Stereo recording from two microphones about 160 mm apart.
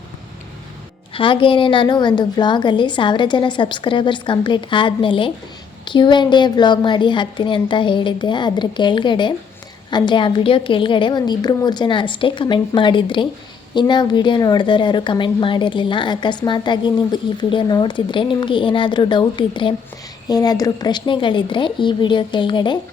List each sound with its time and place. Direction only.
1.1 s a woman's voice: 30° left (ahead or behind)